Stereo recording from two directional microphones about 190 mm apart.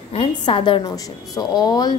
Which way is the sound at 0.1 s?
30° left (ahead or behind).